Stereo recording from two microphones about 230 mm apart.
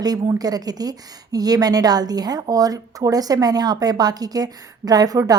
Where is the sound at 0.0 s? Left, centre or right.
Centre.